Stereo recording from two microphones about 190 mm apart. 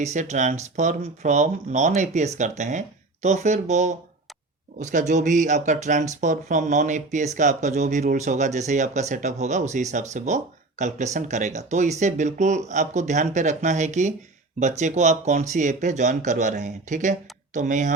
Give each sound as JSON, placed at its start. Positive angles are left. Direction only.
{"t": 0.0, "sound": "speech", "side_deg": -40}